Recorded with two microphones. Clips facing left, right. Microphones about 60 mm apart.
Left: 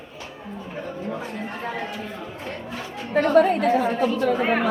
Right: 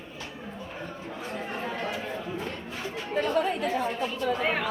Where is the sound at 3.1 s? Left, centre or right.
Left.